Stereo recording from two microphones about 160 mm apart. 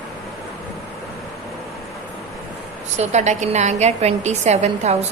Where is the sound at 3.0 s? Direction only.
45° right (ahead or behind).